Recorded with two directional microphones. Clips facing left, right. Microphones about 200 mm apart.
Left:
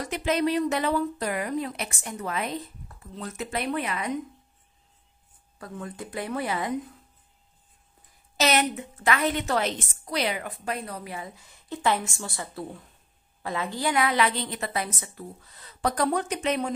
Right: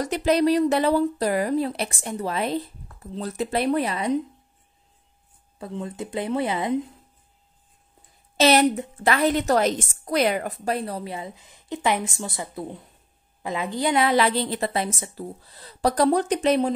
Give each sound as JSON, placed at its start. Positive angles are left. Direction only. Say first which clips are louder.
{"t": 0.0, "sound": "speech", "louder": "right 5 dB", "side_deg": -40}
{"t": 5.6, "sound": "speech", "louder": "right 5 dB", "side_deg": -25}
{"t": 8.4, "sound": "speech", "louder": "right 6 dB", "side_deg": -30}